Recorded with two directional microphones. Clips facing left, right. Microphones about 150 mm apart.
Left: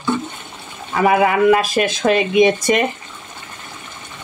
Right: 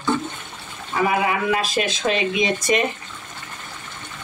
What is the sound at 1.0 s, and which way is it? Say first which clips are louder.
Speech: left 8 dB; 60° left (ahead or behind).